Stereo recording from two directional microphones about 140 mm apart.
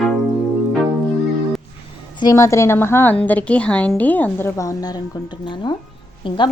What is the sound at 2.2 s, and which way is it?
A woman's voice, 25° left (ahead or behind).